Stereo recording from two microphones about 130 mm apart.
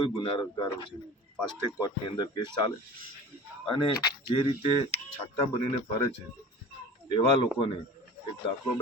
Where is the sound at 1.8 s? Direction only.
35° left (ahead or behind).